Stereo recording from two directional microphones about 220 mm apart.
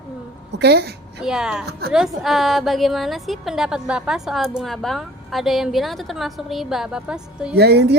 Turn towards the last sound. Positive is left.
turn(degrees=-50)  # may be behind; listen again after turning